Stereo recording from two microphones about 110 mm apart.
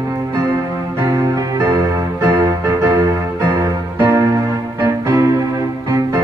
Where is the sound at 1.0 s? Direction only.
30° right (ahead or behind).